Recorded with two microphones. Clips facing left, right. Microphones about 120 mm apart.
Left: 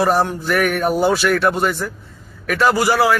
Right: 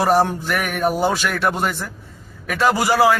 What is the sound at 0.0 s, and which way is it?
Speech, 25° right (ahead or behind).